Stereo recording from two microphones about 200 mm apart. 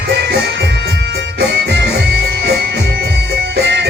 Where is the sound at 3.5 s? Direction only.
60° right (ahead or behind).